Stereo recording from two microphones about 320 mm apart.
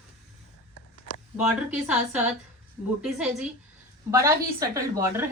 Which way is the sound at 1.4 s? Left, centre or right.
Centre.